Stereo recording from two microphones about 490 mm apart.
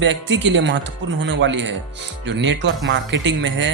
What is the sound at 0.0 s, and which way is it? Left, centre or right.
Speech, right.